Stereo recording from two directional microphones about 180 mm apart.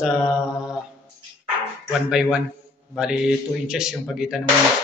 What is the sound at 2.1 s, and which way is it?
Speech, 5° right (ahead or behind).